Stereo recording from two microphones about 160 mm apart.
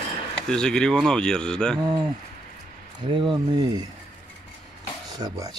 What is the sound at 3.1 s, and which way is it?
Speech, 30° right (ahead or behind).